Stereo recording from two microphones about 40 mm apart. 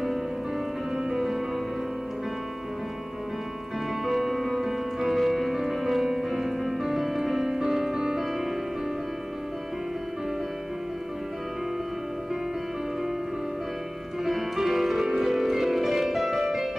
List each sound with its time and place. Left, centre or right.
0.9 s music: centre
4.0 s music: centre
14.2 s music: centre